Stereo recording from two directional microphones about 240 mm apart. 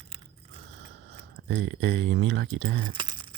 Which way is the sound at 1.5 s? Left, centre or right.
Right.